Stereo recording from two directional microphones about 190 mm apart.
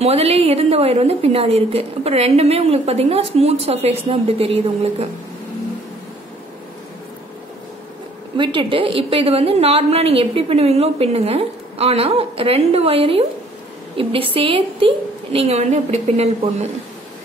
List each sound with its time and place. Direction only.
0.0 s a woman's voice: 30° right (ahead or behind)
8.4 s a woman's voice: 25° right (ahead or behind)